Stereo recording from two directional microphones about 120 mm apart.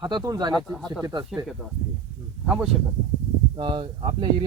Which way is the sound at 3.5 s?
45° right (ahead or behind).